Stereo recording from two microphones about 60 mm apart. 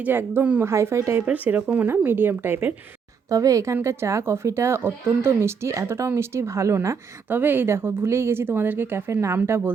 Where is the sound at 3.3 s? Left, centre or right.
Right.